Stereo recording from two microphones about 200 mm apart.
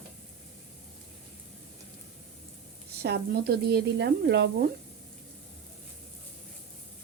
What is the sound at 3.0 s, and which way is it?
Speech, 50° right (ahead or behind).